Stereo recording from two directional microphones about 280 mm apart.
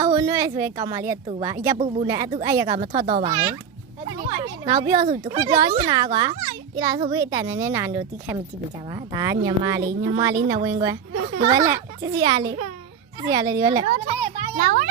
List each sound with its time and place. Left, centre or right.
0.0 s speech: centre
13.9 s a child's voice: right